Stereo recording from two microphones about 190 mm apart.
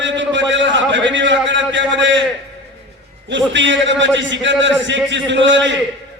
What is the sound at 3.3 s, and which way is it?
A man's voice, 75° right (ahead or behind).